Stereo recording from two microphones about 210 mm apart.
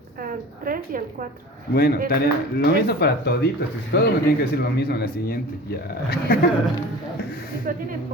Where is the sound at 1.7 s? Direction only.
50° left (ahead or behind).